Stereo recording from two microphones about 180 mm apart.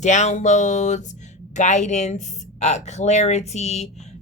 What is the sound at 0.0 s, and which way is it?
A woman's voice, 40° left (ahead or behind).